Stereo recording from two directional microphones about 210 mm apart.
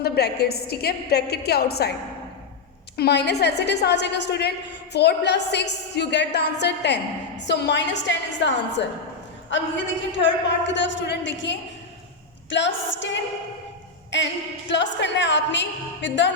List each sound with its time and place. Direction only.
0.0 s a woman's voice: 50° left (ahead or behind)
2.9 s a woman's voice: 50° left (ahead or behind)
14.7 s speech: 55° left (ahead or behind)